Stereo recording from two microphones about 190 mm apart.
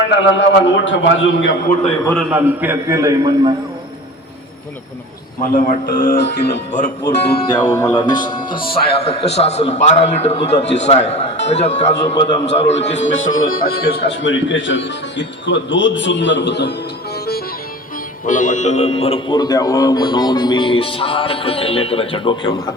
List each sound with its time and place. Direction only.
0.2 s a man's voice: 70° left (ahead or behind)
2.3 s a man's voice: 10° right (ahead or behind)
5.4 s a man's voice: 40° left (ahead or behind)
6.1 s speech: 60° left (ahead or behind)
6.5 s a man's voice: 40° left (ahead or behind)
7.1 s speech: 60° left (ahead or behind)
7.3 s a man's voice: 25° left (ahead or behind)
12.7 s a man's voice: 70° left (ahead or behind)
13.5 s a man's voice: 50° left (ahead or behind)
18.3 s a man's voice: 45° left (ahead or behind); by 22.7 s 20° left (ahead or behind)